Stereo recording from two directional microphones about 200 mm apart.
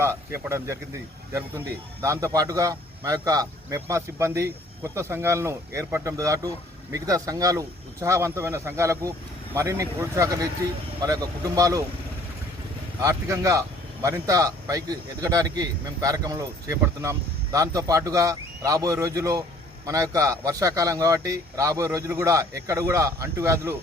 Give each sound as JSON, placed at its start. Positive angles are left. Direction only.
{"t": 0.0, "sound": "speech", "side_deg": -15}
{"t": 13.0, "sound": "speech", "side_deg": -15}